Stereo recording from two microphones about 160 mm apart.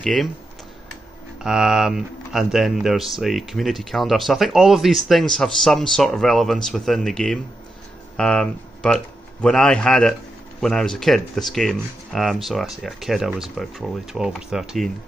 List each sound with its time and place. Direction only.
0.0 s speech: centre (ahead or behind)
1.4 s speech: 5° right (ahead or behind)